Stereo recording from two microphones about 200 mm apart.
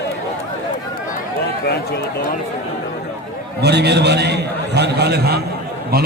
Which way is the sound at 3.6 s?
55° right (ahead or behind).